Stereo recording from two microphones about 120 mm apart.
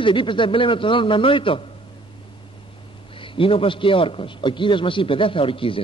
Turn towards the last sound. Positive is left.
turn(degrees=50)  # may be behind; listen again after turning